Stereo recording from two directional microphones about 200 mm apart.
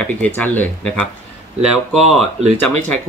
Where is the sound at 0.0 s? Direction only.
10° left (ahead or behind).